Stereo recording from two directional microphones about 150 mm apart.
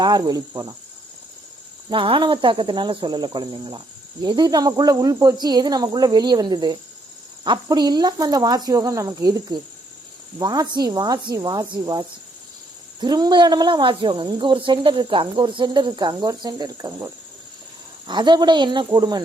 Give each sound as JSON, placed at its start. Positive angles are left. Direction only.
{"t": 0.0, "sound": "speech", "side_deg": -25}
{"t": 1.9, "sound": "speech", "side_deg": -35}
{"t": 18.1, "sound": "speech", "side_deg": -30}